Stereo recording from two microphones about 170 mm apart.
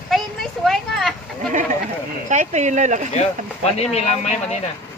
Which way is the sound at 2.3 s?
45° right (ahead or behind).